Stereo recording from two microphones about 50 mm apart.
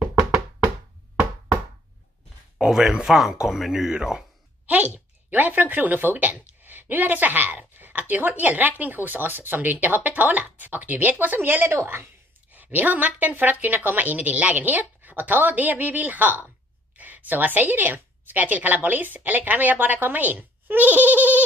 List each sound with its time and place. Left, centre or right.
2.6 s speech: centre
4.6 s a woman's voice: right
12.4 s a woman's voice: right